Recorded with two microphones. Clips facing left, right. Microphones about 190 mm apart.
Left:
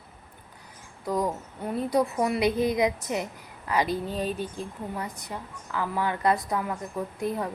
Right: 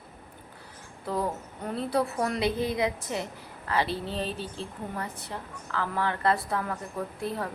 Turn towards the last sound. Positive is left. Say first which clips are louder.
# left 3 dB
turn(degrees=15)  # may be behind; listen again after turning